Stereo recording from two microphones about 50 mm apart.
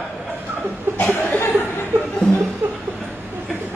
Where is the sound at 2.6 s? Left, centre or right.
Right.